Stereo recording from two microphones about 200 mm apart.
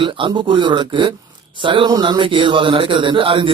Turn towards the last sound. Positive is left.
turn(degrees=-25)  # may be behind; listen again after turning